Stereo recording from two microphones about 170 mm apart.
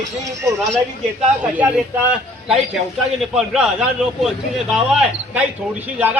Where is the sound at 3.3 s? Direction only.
Centre (ahead or behind).